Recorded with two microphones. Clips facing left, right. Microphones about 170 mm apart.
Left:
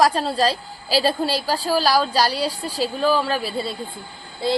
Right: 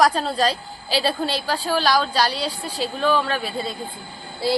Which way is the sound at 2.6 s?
35° left (ahead or behind).